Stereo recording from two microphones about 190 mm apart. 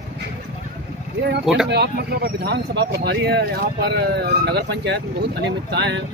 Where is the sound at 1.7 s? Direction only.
55° right (ahead or behind).